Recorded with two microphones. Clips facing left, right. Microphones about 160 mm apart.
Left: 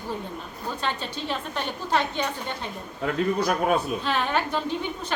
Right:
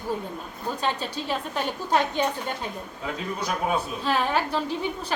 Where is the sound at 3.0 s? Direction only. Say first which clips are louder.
Left 7 dB; 55° left (ahead or behind).